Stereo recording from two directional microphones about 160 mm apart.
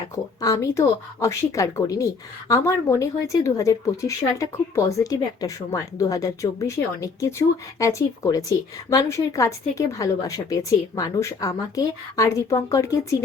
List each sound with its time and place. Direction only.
0.4 s speech: 20° left (ahead or behind)